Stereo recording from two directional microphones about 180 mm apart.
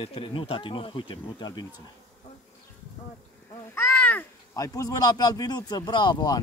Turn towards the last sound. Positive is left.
turn(degrees=25)  # may be behind; listen again after turning